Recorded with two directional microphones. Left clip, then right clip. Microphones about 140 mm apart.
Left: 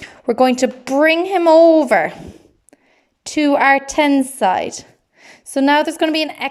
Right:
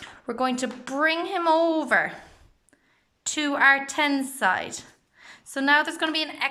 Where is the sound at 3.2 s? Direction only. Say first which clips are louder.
Left 7 dB; 40° left (ahead or behind).